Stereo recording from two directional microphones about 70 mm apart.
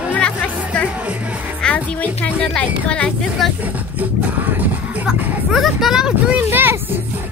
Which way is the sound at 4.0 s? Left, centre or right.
Right.